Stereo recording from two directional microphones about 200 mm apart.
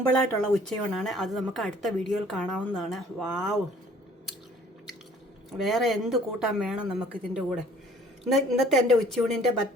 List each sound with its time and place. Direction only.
0.2 s a woman's voice: 5° left (ahead or behind)
5.5 s a woman's voice: centre (ahead or behind)
8.2 s a woman's voice: centre (ahead or behind)